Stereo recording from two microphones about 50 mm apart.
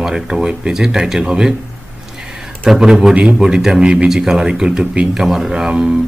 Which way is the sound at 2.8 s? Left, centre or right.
Centre.